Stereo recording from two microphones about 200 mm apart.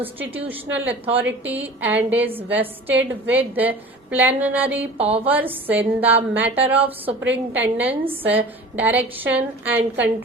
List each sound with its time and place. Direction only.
0.0 s a woman's voice: 10° right (ahead or behind)
4.9 s a woman's voice: 30° right (ahead or behind)
5.2 s a woman's voice: 10° right (ahead or behind)